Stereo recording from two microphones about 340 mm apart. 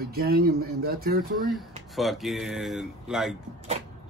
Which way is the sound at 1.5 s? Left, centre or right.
Centre.